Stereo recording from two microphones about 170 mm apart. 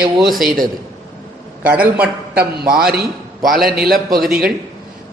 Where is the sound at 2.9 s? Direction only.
60° right (ahead or behind).